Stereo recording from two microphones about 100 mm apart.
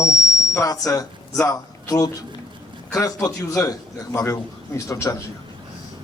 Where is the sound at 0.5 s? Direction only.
35° left (ahead or behind).